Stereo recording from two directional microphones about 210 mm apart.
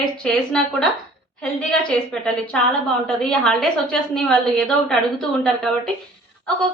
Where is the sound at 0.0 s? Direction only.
5° left (ahead or behind).